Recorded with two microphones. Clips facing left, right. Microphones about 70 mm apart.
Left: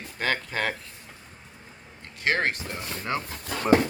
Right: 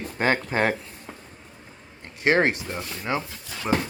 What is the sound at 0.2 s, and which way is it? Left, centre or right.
Speech, right.